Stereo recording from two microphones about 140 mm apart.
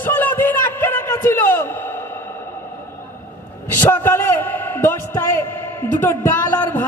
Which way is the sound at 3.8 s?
15° left (ahead or behind).